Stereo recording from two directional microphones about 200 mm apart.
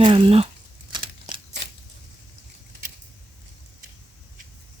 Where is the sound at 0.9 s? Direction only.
25° right (ahead or behind).